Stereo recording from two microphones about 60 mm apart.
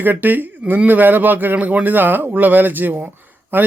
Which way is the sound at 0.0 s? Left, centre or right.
Right.